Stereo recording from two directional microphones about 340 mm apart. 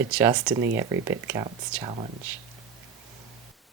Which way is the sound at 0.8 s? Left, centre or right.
Centre.